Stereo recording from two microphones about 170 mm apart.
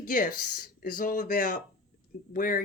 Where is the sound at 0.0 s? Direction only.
55° left (ahead or behind).